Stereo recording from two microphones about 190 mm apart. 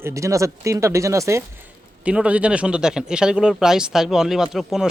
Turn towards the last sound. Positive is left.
turn(degrees=0)  # may be behind; listen again after turning